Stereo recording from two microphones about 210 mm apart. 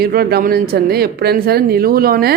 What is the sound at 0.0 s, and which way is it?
Speech, 45° right (ahead or behind).